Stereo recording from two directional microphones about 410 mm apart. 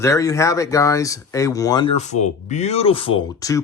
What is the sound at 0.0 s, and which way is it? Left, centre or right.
Speech, centre.